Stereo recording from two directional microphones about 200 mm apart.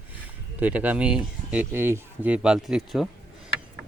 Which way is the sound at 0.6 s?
10° right (ahead or behind).